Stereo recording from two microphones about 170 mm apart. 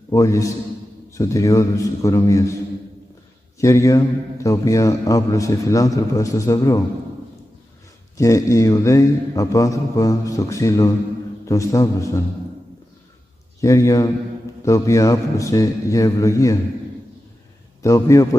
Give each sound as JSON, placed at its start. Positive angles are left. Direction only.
{"t": 0.1, "sound": "a man's voice", "side_deg": 20}
{"t": 3.6, "sound": "a man's voice", "side_deg": 20}
{"t": 8.2, "sound": "a man's voice", "side_deg": 20}
{"t": 13.6, "sound": "a man's voice", "side_deg": 20}
{"t": 17.8, "sound": "a man's voice", "side_deg": 20}